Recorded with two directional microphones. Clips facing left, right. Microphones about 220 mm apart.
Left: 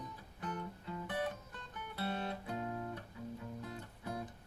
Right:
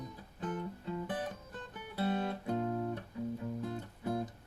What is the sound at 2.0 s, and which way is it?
Music, 40° right (ahead or behind).